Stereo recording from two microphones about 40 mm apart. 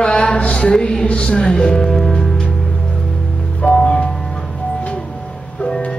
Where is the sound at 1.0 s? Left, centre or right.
Left.